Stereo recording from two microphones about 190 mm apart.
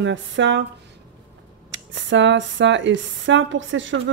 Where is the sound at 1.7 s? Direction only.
70° right (ahead or behind).